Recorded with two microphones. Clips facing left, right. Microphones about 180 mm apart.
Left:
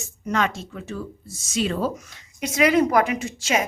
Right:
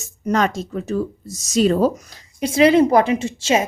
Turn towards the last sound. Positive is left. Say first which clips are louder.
# right 5 dB
turn(degrees=-25)  # may be behind; listen again after turning